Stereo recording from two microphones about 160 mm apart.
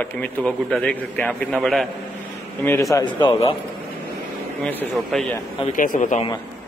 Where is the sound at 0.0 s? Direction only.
5° left (ahead or behind).